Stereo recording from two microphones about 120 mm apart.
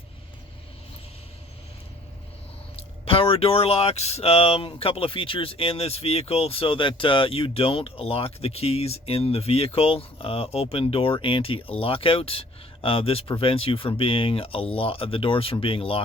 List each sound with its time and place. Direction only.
2.7 s speech: 50° left (ahead or behind)